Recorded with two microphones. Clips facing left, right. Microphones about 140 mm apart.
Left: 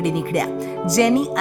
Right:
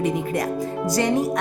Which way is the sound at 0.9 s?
90° left.